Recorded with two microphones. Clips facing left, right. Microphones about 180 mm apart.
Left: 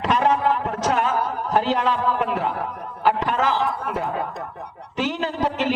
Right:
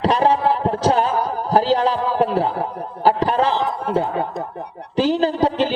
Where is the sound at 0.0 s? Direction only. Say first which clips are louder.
Right 3 dB; 30° right (ahead or behind).